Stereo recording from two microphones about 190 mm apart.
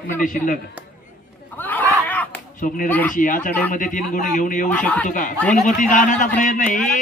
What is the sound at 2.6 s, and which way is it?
A man's voice, 45° left (ahead or behind).